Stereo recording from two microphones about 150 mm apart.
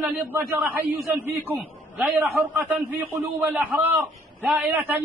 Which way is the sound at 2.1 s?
15° right (ahead or behind).